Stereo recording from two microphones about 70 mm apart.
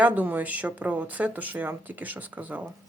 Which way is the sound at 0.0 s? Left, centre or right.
Right.